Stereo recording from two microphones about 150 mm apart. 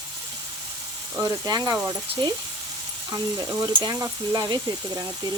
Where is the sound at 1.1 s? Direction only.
15° right (ahead or behind).